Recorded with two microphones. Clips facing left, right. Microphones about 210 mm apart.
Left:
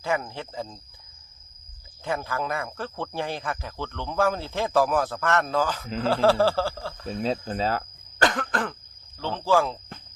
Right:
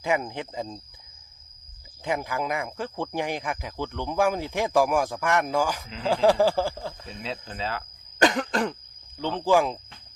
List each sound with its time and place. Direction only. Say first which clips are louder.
0.0 s speech: right 2 dB; 15° right (ahead or behind)
2.0 s speech: right 1 dB; 15° right (ahead or behind)
7.0 s speech: left 8 dB; 40° left (ahead or behind)
8.2 s cough: right 3 dB; 20° right (ahead or behind)
9.1 s speech: right 1 dB; 15° right (ahead or behind)